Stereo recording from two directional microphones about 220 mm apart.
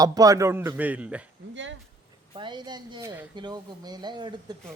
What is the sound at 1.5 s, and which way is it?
Speech, 55° right (ahead or behind).